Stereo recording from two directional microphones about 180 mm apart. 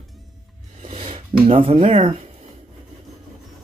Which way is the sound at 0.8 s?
30° right (ahead or behind).